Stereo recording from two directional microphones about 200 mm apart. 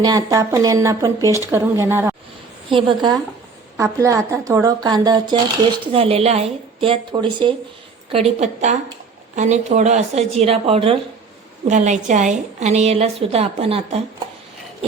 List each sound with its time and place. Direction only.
0.0 s speech: 20° right (ahead or behind)
2.6 s a woman's voice: 25° right (ahead or behind)